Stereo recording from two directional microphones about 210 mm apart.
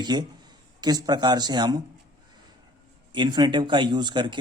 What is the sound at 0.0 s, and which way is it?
Speech, 20° right (ahead or behind).